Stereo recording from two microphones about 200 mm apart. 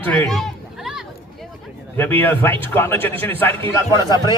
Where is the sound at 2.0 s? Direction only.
10° left (ahead or behind).